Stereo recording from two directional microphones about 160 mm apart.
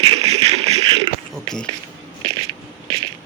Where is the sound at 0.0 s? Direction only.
35° right (ahead or behind).